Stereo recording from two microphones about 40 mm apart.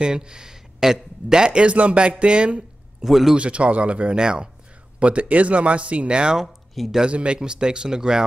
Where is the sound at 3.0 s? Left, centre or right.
Centre.